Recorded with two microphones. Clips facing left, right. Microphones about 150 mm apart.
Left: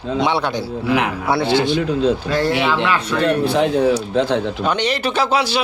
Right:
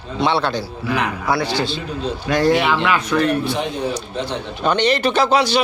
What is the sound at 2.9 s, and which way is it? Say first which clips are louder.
Speech: right 1 dB; 10° right (ahead or behind).